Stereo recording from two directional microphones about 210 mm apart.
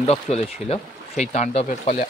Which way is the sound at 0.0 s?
30° left (ahead or behind).